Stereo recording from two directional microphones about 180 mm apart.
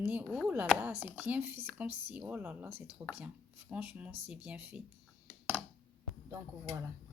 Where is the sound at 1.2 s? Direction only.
10° right (ahead or behind).